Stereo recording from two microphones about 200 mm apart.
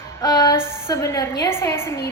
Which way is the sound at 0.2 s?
20° left (ahead or behind).